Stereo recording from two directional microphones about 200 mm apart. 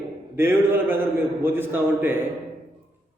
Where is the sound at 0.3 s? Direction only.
10° right (ahead or behind).